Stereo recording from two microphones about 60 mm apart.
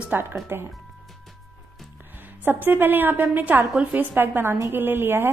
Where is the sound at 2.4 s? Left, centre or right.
Right.